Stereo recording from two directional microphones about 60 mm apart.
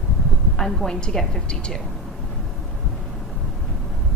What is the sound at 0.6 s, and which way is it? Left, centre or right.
A woman's voice, centre.